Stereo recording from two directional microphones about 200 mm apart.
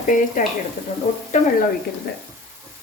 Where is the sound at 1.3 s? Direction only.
35° left (ahead or behind).